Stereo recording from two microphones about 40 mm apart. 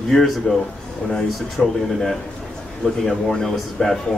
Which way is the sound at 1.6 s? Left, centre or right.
Right.